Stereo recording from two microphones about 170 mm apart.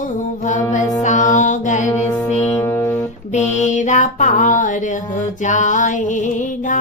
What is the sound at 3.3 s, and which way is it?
Female singing, 40° left (ahead or behind).